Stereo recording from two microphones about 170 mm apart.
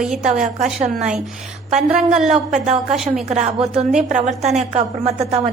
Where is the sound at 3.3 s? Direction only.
40° right (ahead or behind).